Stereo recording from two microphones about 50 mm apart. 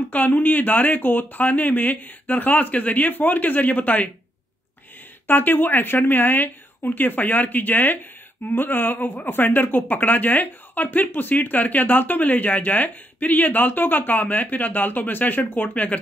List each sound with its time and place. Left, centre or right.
0.1 s speech: left
5.2 s speech: left